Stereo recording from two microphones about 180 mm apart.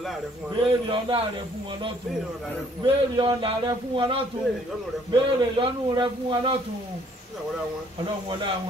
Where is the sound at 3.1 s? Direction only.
25° right (ahead or behind).